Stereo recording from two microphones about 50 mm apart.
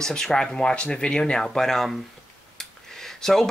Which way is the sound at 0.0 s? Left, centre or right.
Centre.